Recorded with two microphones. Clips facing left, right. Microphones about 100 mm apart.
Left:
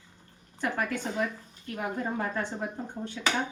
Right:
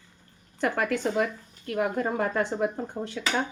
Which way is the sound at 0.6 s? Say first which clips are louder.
Right 5 dB; 75° right (ahead or behind).